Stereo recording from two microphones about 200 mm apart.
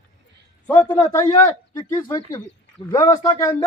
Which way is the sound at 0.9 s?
15° left (ahead or behind).